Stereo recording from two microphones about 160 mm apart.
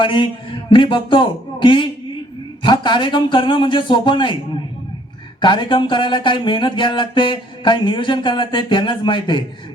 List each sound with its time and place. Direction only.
0.0 s a man's voice: 30° left (ahead or behind)
5.4 s speech: 30° left (ahead or behind)